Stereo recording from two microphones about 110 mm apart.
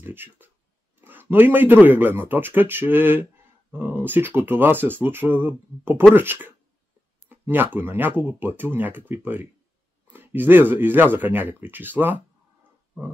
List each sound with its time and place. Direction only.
0.0 s speech: 20° right (ahead or behind)